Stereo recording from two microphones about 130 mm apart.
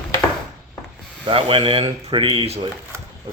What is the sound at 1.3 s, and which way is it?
Speech, 45° right (ahead or behind).